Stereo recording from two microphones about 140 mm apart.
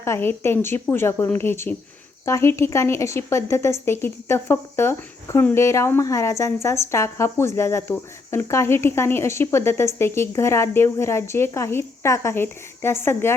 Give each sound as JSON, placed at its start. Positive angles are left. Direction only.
{"t": 0.0, "sound": "speech", "side_deg": 15}